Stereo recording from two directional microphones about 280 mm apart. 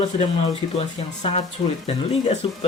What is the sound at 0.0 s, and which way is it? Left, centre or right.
Speech, left.